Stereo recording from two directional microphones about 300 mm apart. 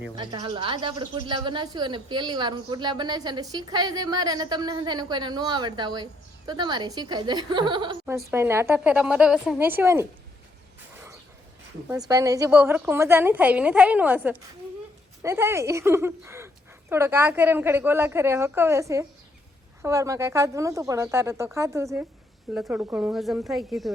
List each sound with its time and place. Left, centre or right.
0.2 s speech: centre
11.9 s speech: centre